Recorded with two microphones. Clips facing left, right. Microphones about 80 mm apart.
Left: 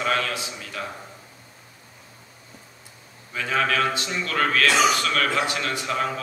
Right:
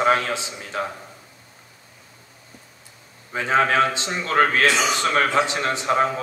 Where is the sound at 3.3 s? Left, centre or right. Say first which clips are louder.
Right 5 dB; right.